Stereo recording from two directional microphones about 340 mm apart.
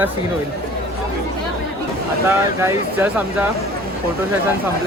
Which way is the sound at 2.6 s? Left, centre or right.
Centre.